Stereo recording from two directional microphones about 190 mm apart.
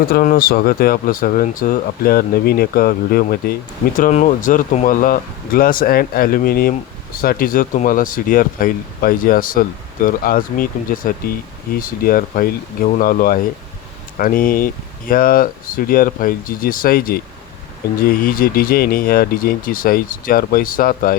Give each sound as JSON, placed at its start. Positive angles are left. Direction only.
{"t": 0.1, "sound": "speech", "side_deg": 50}
{"t": 3.9, "sound": "speech", "side_deg": 40}